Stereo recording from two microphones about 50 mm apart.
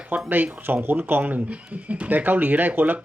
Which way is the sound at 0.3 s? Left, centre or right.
Right.